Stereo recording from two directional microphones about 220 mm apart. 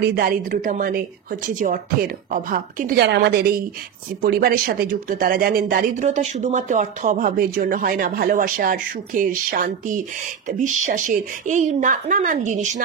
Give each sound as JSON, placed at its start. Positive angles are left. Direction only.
{"t": 0.0, "sound": "a woman's voice", "side_deg": -45}